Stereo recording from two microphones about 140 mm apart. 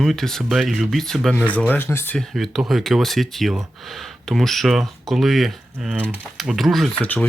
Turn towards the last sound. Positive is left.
turn(degrees=10)  # may be behind; listen again after turning